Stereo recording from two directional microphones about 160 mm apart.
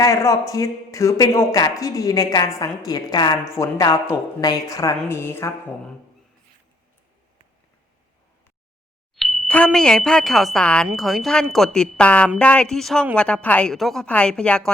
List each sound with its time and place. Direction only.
0.0 s a woman's voice: 20° left (ahead or behind)
9.1 s a woman's voice: centre (ahead or behind)